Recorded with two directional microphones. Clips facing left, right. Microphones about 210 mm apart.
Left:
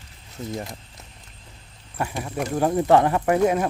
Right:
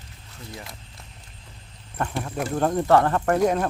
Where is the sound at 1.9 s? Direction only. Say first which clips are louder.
Even; 10° left (ahead or behind).